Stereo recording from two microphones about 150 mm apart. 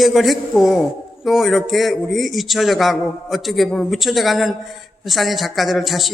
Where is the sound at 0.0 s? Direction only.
Centre (ahead or behind).